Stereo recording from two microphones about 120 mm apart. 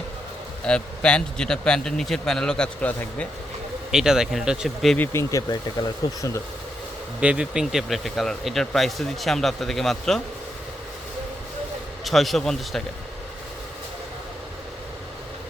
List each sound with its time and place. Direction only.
0.6 s a man's voice: 10° left (ahead or behind)
3.9 s speech: 5° right (ahead or behind)
4.9 s speech: 20° left (ahead or behind)
7.2 s speech: 10° right (ahead or behind)
12.0 s speech: centre (ahead or behind)